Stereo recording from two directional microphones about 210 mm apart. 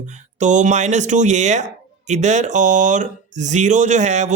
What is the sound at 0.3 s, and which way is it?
Speech, 35° right (ahead or behind).